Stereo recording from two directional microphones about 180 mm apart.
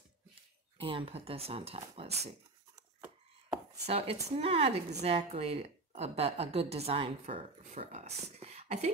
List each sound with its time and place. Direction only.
0.7 s a woman's voice: 30° right (ahead or behind)
3.4 s chopping: 35° right (ahead or behind)
4.4 s a woman's voice: 30° right (ahead or behind)